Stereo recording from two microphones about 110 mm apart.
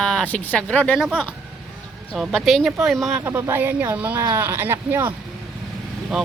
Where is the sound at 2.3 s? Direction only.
Centre (ahead or behind).